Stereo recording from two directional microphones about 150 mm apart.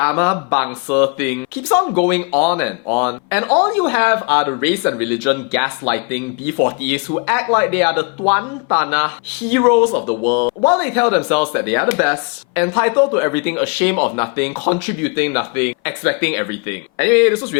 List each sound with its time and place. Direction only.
0.0 s speech: 20° left (ahead or behind)